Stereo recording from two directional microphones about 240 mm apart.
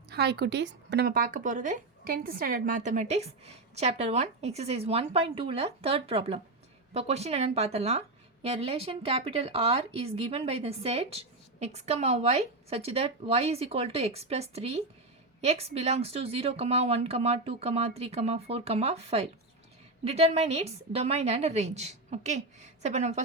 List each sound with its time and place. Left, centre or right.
0.1 s a woman's voice: right